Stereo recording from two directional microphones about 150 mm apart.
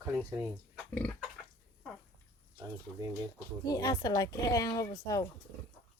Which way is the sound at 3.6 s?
25° left (ahead or behind).